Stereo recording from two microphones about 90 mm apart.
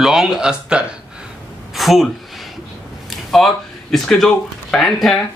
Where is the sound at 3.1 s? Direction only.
Centre (ahead or behind).